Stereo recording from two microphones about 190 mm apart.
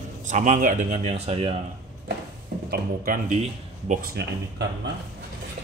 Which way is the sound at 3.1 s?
45° right (ahead or behind).